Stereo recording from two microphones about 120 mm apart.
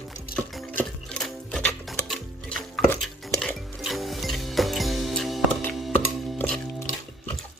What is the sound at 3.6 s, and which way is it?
Music, centre (ahead or behind).